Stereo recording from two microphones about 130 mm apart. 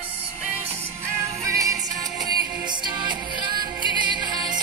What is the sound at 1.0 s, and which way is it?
Music, 20° right (ahead or behind).